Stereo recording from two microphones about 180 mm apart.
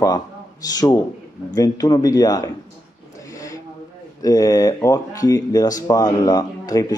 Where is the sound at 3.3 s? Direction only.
20° left (ahead or behind).